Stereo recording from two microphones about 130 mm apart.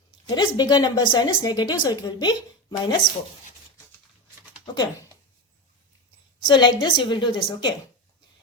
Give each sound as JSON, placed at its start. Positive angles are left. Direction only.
{"t": 0.3, "sound": "a woman's voice", "side_deg": 35}
{"t": 4.6, "sound": "speech", "side_deg": 30}
{"t": 6.4, "sound": "a woman's voice", "side_deg": 35}